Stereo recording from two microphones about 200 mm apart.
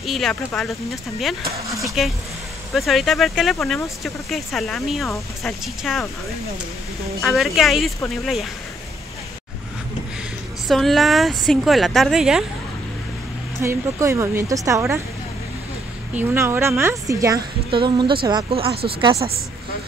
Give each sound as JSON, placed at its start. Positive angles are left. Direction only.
{"t": 0.0, "sound": "speech", "side_deg": 0}
{"t": 2.0, "sound": "speech", "side_deg": 0}
{"t": 7.2, "sound": "speech", "side_deg": 0}
{"t": 10.7, "sound": "speech", "side_deg": 0}
{"t": 13.6, "sound": "a woman's voice", "side_deg": -15}
{"t": 16.2, "sound": "a woman's voice", "side_deg": -10}